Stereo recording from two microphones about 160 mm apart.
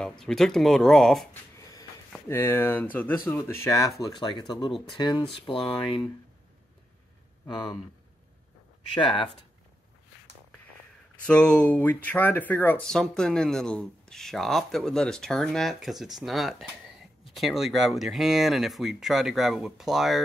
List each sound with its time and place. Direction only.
0.0 s speech: 5° left (ahead or behind)
1.3 s a sound: 20° left (ahead or behind)
2.2 s speech: 15° left (ahead or behind)
7.4 s speech: 30° left (ahead or behind)
8.9 s speech: 30° left (ahead or behind)
11.2 s speech: 5° left (ahead or behind)